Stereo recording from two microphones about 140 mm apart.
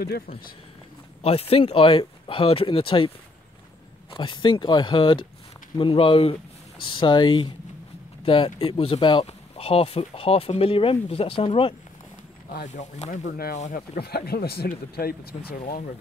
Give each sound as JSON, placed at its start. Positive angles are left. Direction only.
{"t": 1.2, "sound": "speech", "side_deg": 45}
{"t": 4.1, "sound": "speech", "side_deg": 35}
{"t": 12.5, "sound": "speech", "side_deg": 60}
{"t": 13.4, "sound": "speech", "side_deg": 70}